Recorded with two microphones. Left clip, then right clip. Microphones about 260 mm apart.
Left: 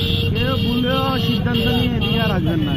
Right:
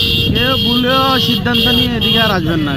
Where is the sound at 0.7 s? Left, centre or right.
Right.